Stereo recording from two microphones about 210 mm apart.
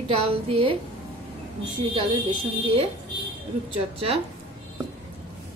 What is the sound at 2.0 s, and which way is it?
Speech, 25° right (ahead or behind).